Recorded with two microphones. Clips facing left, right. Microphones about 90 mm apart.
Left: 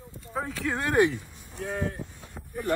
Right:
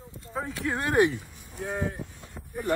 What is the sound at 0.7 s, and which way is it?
Speech, 15° right (ahead or behind).